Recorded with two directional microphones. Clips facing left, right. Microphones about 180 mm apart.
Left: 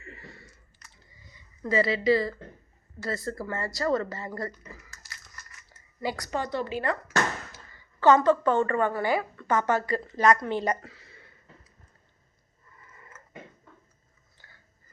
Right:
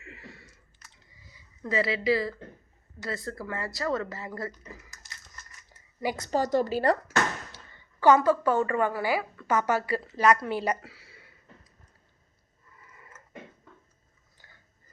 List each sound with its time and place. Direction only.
0.0 s clicking: centre (ahead or behind)
1.3 s speech: centre (ahead or behind)
4.5 s crumpling: 20° right (ahead or behind)
6.1 s a woman's voice: 25° right (ahead or behind)
6.4 s a woman's voice: 40° right (ahead or behind)
7.9 s a woman's voice: 10° right (ahead or behind)
12.8 s a sound: 10° right (ahead or behind)
14.4 s biting: 15° right (ahead or behind)